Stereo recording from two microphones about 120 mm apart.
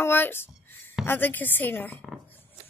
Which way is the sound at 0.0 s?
20° left (ahead or behind).